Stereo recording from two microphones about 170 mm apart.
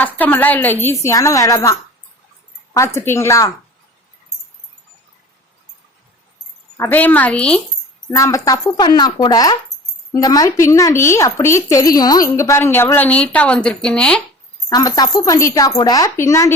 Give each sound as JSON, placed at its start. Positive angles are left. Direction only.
{"t": 0.0, "sound": "a woman's voice", "side_deg": 10}
{"t": 6.7, "sound": "a woman's voice", "side_deg": 10}
{"t": 8.1, "sound": "a woman's voice", "side_deg": 20}
{"t": 14.7, "sound": "a woman's voice", "side_deg": 20}